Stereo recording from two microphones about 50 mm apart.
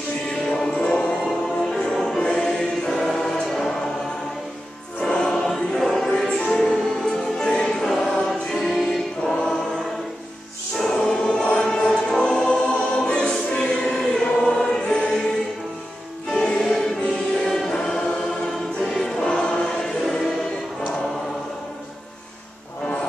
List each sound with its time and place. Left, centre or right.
0.5 s music: centre
2.2 s choir: centre
5.0 s choir: centre
6.0 s music: centre
10.8 s choir: centre
11.5 s music: centre
12.4 s choir: centre
16.3 s music: centre
17.5 s choir: centre
18.8 s music: centre